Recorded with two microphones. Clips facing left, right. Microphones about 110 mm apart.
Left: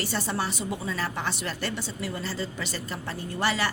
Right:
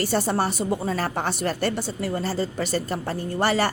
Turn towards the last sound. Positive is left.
turn(degrees=-45)  # may be behind; listen again after turning